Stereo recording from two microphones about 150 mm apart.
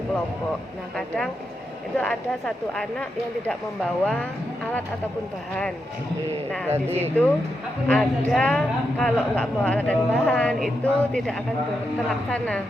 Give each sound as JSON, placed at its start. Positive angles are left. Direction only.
{"t": 0.9, "sound": "a woman's voice", "side_deg": 5}
{"t": 6.7, "sound": "speech", "side_deg": -15}
{"t": 7.9, "sound": "a woman's voice", "side_deg": 5}